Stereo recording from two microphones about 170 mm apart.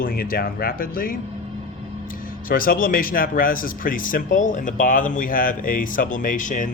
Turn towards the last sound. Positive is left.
turn(degrees=50)  # may be behind; listen again after turning